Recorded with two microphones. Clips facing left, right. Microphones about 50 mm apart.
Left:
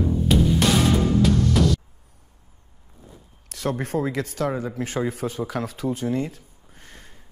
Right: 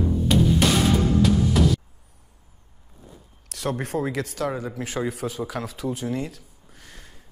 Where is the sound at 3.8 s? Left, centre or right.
Right.